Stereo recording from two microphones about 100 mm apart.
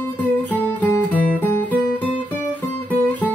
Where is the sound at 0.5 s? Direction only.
15° left (ahead or behind).